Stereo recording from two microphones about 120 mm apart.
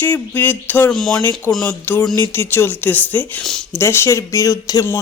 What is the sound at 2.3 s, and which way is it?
Speech, 20° left (ahead or behind).